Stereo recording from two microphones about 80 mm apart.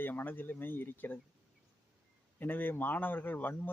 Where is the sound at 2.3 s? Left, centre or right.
Left.